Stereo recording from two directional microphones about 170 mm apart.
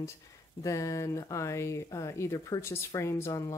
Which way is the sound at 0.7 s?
20° left (ahead or behind).